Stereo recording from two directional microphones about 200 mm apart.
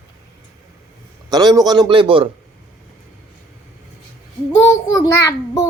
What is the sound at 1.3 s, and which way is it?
Speech, 20° right (ahead or behind).